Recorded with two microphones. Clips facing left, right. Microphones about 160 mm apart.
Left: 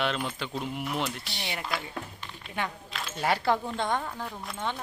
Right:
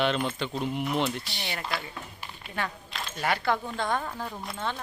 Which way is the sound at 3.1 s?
30° left (ahead or behind).